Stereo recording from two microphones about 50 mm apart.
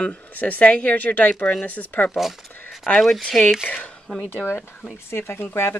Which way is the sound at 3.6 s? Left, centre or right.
Left.